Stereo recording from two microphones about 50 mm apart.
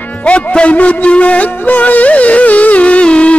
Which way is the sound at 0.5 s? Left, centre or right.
Left.